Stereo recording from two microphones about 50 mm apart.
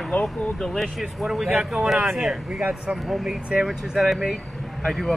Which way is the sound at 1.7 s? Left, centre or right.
Centre.